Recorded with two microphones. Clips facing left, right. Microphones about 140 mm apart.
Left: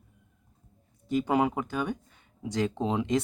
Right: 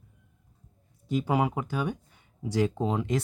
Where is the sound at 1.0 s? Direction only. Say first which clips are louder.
Left 1 dB; 10° right (ahead or behind).